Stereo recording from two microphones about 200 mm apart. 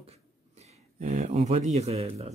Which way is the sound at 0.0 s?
30° right (ahead or behind).